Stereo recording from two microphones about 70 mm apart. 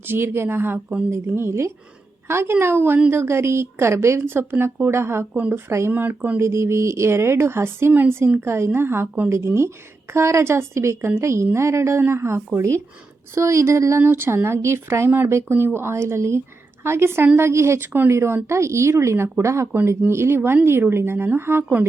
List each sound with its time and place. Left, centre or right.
0.1 s speech: right
5.9 s speech: right
6.4 s speech: right
14.0 s speech: right
17.7 s speech: right
18.1 s speech: right